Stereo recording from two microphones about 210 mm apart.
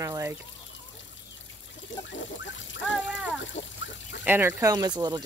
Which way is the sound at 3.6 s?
30° left (ahead or behind).